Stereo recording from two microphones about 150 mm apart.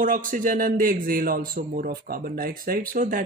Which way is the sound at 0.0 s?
65° right (ahead or behind).